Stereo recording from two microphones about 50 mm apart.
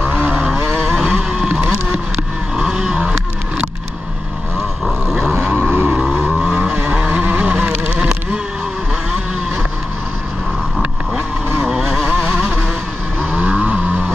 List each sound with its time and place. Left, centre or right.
0.2 s vehicle: right
0.9 s vehicle: centre
5.0 s vehicle: centre
5.5 s a sound: right
5.9 s vehicle: centre
8.0 s insect: centre
11.6 s vehicle: centre
13.5 s vehicle: right